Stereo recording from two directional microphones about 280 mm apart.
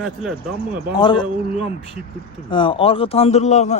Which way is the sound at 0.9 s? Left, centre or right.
Centre.